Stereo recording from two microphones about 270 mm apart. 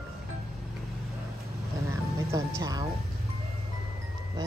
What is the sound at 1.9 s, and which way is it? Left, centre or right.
Music, centre.